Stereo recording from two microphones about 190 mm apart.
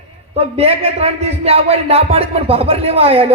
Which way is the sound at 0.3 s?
30° right (ahead or behind).